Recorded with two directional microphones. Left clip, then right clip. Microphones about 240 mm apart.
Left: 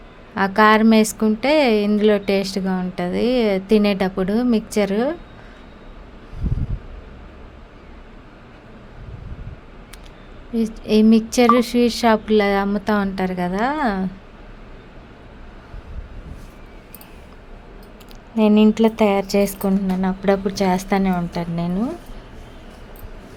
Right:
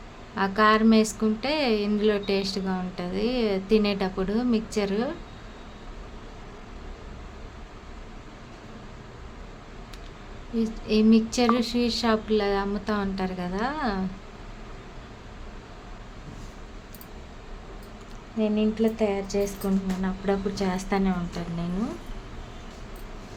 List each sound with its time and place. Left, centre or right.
0.3 s a woman's voice: left
10.8 s a woman's voice: left
18.3 s speech: left